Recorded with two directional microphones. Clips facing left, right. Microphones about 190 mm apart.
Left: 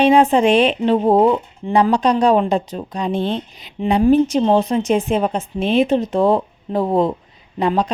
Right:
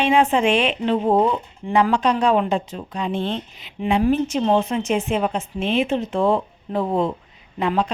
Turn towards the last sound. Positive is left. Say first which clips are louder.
# left 3 dB
turn(degrees=35)  # may be behind; listen again after turning